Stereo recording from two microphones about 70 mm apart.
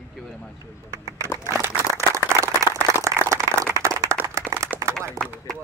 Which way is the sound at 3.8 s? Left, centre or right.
Right.